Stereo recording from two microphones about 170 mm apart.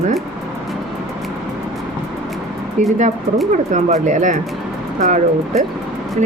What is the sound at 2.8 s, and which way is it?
A woman's voice, 45° right (ahead or behind).